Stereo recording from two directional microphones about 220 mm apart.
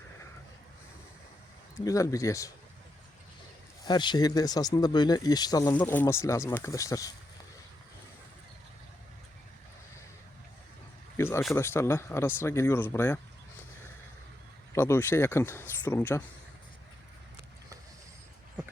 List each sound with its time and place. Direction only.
1.8 s speech: 15° left (ahead or behind)
3.8 s speech: 20° left (ahead or behind)
11.2 s speech: 10° left (ahead or behind)
14.7 s speech: 10° left (ahead or behind)